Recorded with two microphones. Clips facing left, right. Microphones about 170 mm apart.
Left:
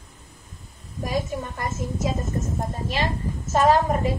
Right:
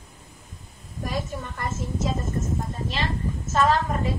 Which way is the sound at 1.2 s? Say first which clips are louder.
Left 4 dB; 15° left (ahead or behind).